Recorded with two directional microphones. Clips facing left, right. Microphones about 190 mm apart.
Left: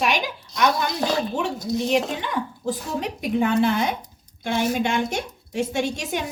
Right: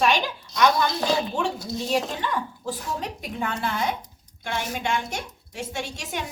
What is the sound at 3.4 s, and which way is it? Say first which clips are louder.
A woman's voice: left 7 dB; 20° left (ahead or behind).